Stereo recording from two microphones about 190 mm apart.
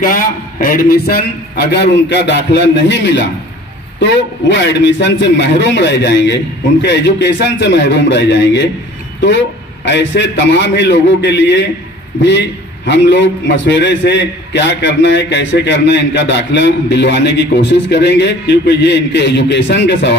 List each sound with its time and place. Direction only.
0.0 s a man's voice: 50° left (ahead or behind); by 20.2 s 65° left (ahead or behind)